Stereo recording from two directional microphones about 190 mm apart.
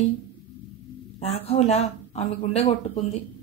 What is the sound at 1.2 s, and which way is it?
A woman's voice, 35° left (ahead or behind).